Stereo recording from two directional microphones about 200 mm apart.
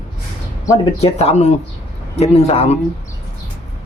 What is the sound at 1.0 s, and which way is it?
Speech, 35° left (ahead or behind).